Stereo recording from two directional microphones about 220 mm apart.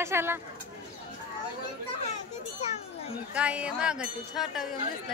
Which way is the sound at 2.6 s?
30° left (ahead or behind).